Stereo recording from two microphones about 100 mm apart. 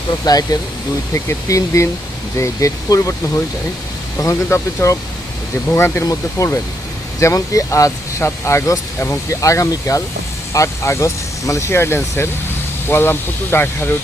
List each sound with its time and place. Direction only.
0.3 s speech: 40° left (ahead or behind)
4.4 s speech: 25° left (ahead or behind)